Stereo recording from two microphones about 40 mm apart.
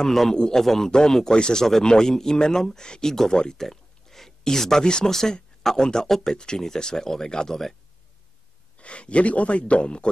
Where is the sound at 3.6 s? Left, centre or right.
Centre.